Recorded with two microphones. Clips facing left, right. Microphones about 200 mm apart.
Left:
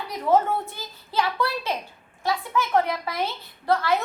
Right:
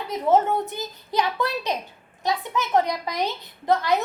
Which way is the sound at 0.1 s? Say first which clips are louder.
Right 1 dB; 20° right (ahead or behind).